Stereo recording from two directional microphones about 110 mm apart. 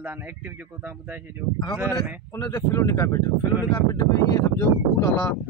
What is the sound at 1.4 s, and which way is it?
Speech, 10° right (ahead or behind).